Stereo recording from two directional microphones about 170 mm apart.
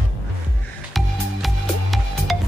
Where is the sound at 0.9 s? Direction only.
Centre (ahead or behind).